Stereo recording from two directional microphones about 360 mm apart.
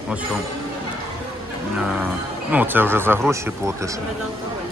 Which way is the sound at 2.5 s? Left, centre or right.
Centre.